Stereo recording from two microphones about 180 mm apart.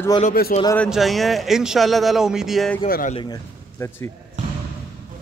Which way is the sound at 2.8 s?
45° left (ahead or behind).